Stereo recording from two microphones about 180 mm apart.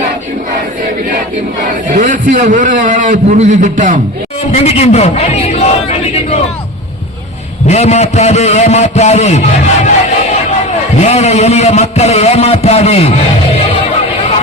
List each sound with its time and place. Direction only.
1.9 s a man's voice: 45° right (ahead or behind)
4.5 s a sound: 35° left (ahead or behind)
7.7 s a man's voice: 40° left (ahead or behind)